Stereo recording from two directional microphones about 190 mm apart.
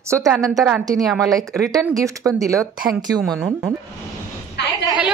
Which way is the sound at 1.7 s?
20° right (ahead or behind).